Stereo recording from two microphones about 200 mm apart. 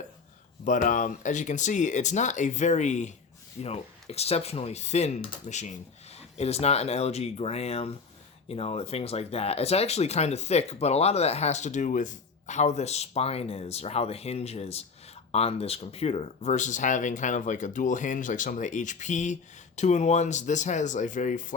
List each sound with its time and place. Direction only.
0.6 s speech: 40° left (ahead or behind)